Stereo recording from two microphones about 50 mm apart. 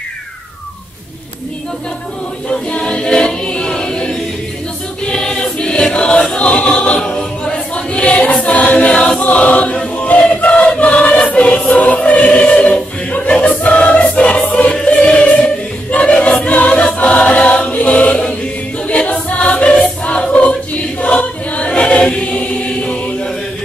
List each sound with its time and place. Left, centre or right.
2.7 s choir: centre
9.2 s choir: left
10.2 s battle cry: left
10.8 s choir: left